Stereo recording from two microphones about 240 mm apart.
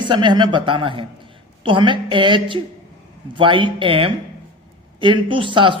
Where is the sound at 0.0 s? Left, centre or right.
Centre.